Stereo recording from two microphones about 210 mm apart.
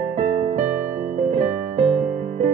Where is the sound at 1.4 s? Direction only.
30° right (ahead or behind).